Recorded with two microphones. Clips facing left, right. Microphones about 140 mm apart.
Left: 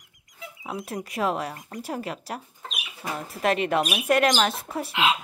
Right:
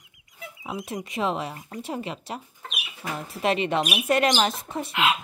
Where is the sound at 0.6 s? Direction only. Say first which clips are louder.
Even; centre (ahead or behind).